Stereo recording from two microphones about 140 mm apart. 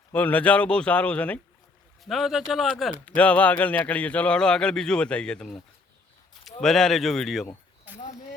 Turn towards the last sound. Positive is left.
turn(degrees=0)  # may be behind; listen again after turning